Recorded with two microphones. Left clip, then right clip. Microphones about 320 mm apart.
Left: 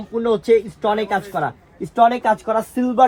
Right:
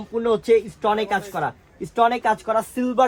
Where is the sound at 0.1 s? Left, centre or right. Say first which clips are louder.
Left 2 dB; centre.